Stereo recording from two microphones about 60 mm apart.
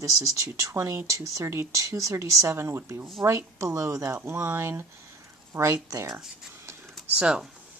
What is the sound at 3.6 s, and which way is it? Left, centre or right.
Speech, right.